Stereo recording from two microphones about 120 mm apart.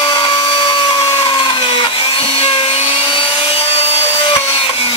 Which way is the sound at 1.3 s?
45° left (ahead or behind).